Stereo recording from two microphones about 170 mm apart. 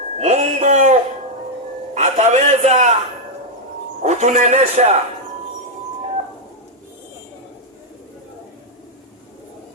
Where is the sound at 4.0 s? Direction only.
45° right (ahead or behind).